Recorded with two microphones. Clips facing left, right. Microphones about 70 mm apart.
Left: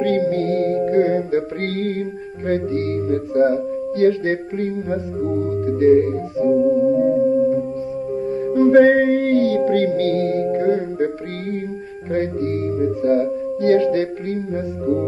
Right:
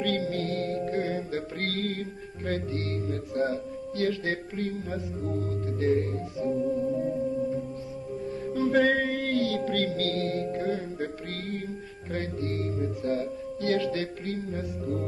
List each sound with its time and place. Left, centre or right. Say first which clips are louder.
0.0 s music: left 11 dB; left
12.1 s music: left 11 dB; left